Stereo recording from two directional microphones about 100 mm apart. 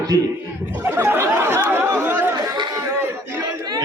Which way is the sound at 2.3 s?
45° right (ahead or behind).